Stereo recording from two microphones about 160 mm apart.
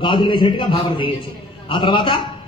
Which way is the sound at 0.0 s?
30° left (ahead or behind).